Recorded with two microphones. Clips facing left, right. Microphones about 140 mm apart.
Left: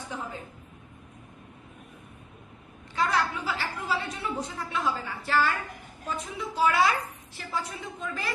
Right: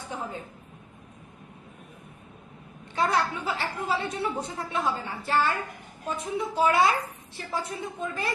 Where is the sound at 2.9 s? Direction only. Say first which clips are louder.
Right 1 dB; 25° right (ahead or behind).